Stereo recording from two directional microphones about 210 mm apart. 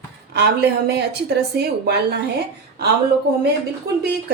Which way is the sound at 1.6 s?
50° right (ahead or behind).